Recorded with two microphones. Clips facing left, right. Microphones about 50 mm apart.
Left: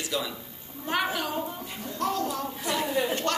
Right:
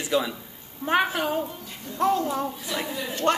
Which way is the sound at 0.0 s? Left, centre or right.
Right.